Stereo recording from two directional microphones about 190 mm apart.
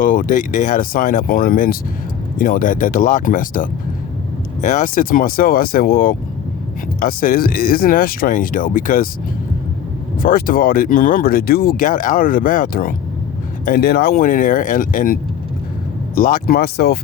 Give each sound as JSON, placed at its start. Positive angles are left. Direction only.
{"t": 0.0, "sound": "speech", "side_deg": 45}
{"t": 10.2, "sound": "speech", "side_deg": 50}